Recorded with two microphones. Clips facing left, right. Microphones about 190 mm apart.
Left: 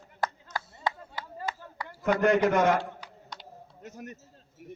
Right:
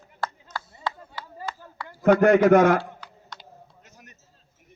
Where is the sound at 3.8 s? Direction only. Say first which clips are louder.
Left 11 dB; 50° left (ahead or behind).